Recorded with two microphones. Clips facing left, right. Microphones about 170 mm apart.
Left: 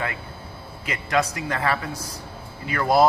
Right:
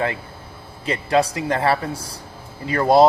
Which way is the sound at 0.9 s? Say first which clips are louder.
Right 5 dB; 30° right (ahead or behind).